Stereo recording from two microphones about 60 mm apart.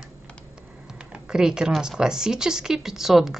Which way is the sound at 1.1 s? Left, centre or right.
Centre.